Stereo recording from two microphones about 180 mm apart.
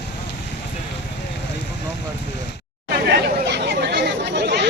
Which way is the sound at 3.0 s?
70° right (ahead or behind).